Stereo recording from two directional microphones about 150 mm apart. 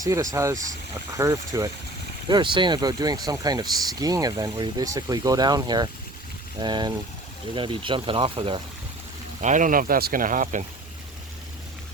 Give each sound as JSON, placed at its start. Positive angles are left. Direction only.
{"t": 0.0, "sound": "speech", "side_deg": -20}
{"t": 9.4, "sound": "speech", "side_deg": -55}